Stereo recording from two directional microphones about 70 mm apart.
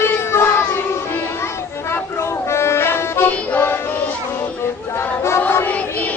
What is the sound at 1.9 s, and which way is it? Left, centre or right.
Music, left.